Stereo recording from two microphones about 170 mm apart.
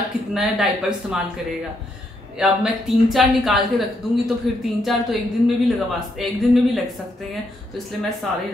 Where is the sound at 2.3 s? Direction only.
Centre (ahead or behind).